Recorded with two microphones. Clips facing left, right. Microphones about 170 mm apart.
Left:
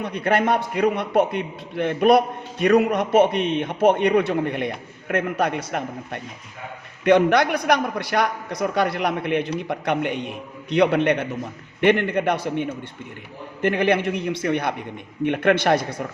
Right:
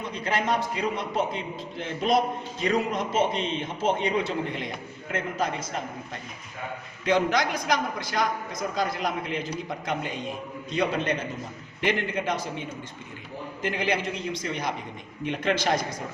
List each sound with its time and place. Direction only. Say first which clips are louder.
0.0 s a man's voice: left 7 dB; 60° left (ahead or behind)